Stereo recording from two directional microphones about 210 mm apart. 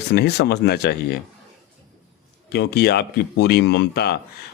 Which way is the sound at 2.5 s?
50° left (ahead or behind).